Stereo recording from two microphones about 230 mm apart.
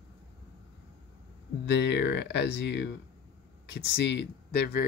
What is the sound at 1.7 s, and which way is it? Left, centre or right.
Speech, left.